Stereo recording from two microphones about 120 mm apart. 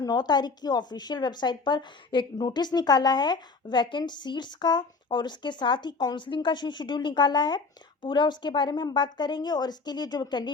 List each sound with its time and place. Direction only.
0.0 s a woman's voice: 35° left (ahead or behind)